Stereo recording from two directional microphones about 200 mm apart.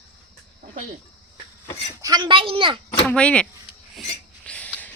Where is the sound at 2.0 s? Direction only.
20° right (ahead or behind).